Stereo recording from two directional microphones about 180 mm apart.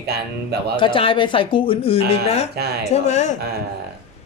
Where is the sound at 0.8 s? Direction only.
30° left (ahead or behind).